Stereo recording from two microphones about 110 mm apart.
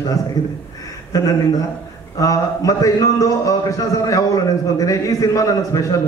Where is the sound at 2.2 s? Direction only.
30° left (ahead or behind).